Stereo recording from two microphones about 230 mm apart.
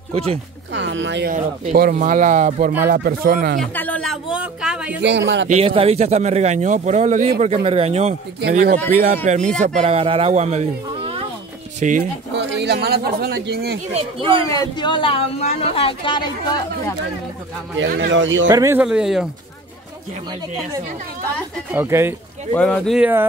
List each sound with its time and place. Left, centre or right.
0.1 s speech: right
0.7 s speech: right
1.3 s a man's voice: right
3.5 s speech: centre
5.0 s speech: right
5.5 s a man's voice: right
8.4 s a man's voice: right
12.4 s speech: right
13.9 s a man's voice: right
14.5 s a woman's voice: centre
17.7 s speech: right
18.5 s speech: centre
21.7 s speech: centre
22.5 s speech: centre